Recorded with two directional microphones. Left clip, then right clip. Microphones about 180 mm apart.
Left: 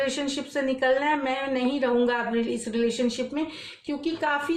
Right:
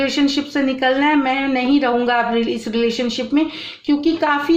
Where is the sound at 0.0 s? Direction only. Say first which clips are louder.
Right 9 dB; 30° right (ahead or behind).